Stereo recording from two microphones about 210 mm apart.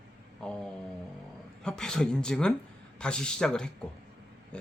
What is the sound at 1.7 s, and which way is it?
Speech, 5° left (ahead or behind).